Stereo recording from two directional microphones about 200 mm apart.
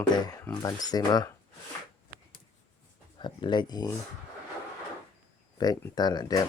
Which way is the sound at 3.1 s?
20° left (ahead or behind).